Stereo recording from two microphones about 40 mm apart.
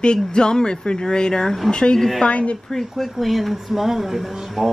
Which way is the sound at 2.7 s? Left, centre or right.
Centre.